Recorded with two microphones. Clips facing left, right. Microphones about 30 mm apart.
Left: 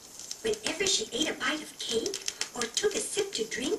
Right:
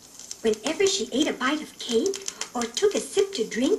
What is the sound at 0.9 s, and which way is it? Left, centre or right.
A woman's voice, centre.